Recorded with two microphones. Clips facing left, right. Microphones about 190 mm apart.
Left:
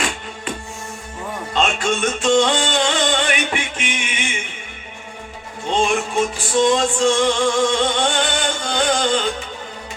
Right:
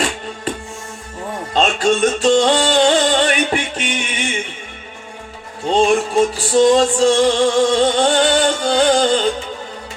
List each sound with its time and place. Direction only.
1.5 s music: 35° right (ahead or behind)
5.7 s music: 35° right (ahead or behind)